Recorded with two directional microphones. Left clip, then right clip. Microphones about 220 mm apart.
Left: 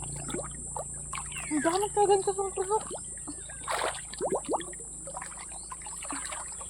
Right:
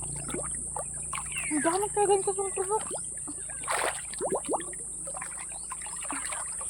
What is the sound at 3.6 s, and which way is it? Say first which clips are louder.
Rowboat: right 1 dB; 15° right (ahead or behind).